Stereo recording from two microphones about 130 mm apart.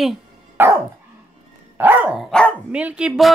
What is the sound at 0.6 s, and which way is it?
Dog, 15° right (ahead or behind).